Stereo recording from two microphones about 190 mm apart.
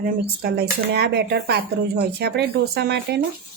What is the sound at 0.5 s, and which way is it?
Speech, 60° right (ahead or behind).